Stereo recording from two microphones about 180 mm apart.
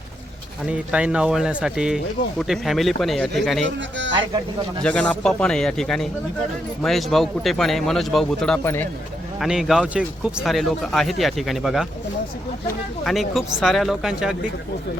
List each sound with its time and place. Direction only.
0.7 s speech: 5° right (ahead or behind)
3.8 s speech: 90° right
4.8 s speech: 5° left (ahead or behind)
9.4 s speech: centre (ahead or behind)
13.1 s speech: centre (ahead or behind)